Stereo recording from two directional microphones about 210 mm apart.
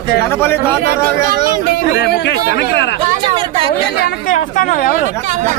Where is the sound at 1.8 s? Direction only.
55° left (ahead or behind).